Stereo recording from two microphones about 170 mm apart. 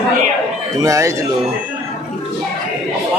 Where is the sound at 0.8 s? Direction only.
20° right (ahead or behind).